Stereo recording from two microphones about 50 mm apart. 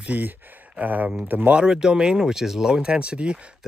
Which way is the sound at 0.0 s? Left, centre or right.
Right.